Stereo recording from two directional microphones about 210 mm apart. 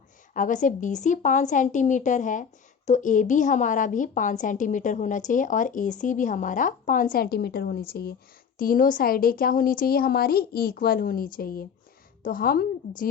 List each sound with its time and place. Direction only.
0.3 s a woman's voice: 35° left (ahead or behind)